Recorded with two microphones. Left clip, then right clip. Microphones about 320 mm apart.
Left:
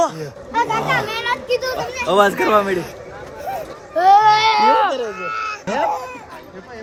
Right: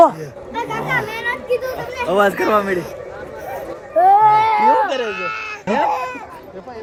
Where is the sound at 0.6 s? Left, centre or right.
Centre.